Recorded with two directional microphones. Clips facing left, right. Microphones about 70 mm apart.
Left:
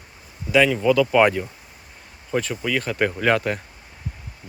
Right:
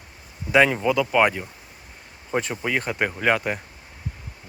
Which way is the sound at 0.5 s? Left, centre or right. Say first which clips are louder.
Even; right.